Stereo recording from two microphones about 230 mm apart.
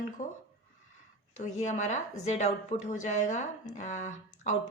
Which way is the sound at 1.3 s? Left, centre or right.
Left.